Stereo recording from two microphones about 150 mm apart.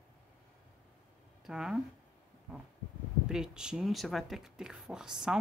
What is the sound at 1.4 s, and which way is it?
Speech, 5° right (ahead or behind).